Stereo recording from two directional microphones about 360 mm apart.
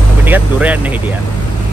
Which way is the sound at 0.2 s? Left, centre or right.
Centre.